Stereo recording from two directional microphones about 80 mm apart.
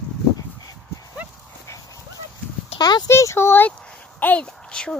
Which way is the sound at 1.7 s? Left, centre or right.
Left.